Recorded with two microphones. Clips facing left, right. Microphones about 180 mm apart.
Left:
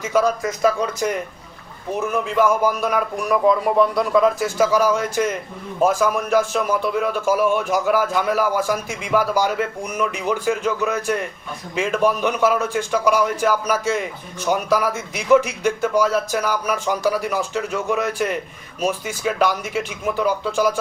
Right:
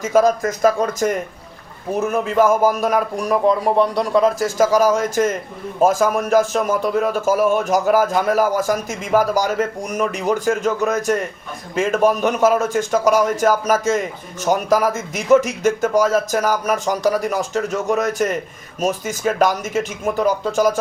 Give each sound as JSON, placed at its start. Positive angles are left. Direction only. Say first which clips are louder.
{"t": 0.0, "sound": "a man's voice", "louder": "right 4 dB", "side_deg": -45}